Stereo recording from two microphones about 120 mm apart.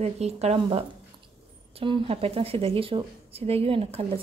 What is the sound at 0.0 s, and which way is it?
Speech, 60° right (ahead or behind).